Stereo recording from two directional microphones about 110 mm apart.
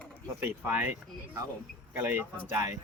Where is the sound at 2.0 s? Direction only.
20° right (ahead or behind).